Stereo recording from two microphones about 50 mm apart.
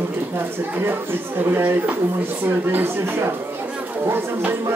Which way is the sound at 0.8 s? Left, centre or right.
Right.